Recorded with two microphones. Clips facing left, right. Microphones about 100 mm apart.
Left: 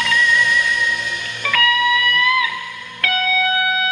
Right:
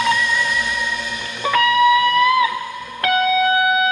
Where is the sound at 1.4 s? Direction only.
30° right (ahead or behind).